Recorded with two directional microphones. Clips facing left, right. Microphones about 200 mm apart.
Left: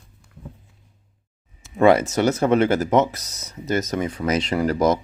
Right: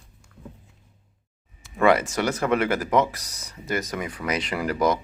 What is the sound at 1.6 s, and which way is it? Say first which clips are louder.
Speech: left 4 dB; 25° left (ahead or behind).